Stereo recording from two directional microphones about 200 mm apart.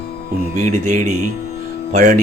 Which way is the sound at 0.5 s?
40° right (ahead or behind).